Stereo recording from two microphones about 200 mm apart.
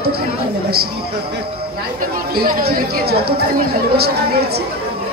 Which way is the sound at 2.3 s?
50° right (ahead or behind).